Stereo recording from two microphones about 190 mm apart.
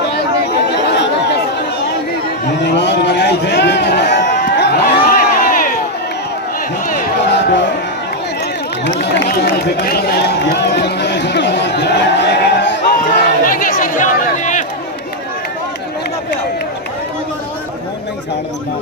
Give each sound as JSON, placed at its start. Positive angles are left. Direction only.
{"t": 0.9, "sound": "chatter", "side_deg": 65}
{"t": 2.6, "sound": "a man's voice", "side_deg": 65}
{"t": 4.3, "sound": "crowd", "side_deg": 60}
{"t": 7.3, "sound": "music", "side_deg": 65}
{"t": 8.8, "sound": "speech", "side_deg": 55}
{"t": 12.9, "sound": "a sound", "side_deg": 45}